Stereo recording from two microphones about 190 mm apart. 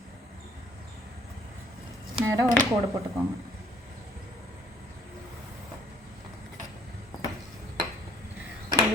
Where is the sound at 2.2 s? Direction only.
15° right (ahead or behind).